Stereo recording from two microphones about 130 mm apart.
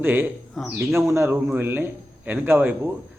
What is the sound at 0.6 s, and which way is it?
Speech, centre (ahead or behind).